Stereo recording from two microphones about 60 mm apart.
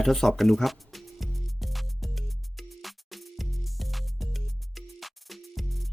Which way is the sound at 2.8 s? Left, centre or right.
Centre.